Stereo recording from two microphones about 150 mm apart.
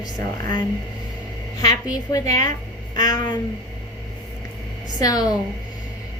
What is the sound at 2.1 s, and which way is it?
A woman's voice, 25° left (ahead or behind).